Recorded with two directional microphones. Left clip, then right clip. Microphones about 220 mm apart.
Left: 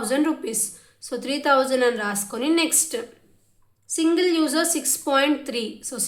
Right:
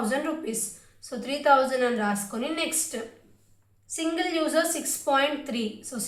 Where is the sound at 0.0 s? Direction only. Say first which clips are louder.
Left 5 dB; 45° left (ahead or behind).